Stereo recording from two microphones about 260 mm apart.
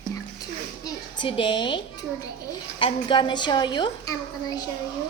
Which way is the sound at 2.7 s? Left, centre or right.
Centre.